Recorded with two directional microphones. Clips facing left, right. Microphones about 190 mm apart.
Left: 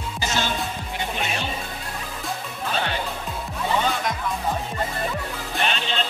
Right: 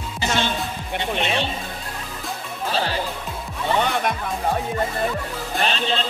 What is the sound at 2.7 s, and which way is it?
Speech, 35° right (ahead or behind).